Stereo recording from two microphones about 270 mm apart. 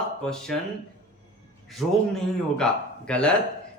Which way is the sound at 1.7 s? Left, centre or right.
Centre.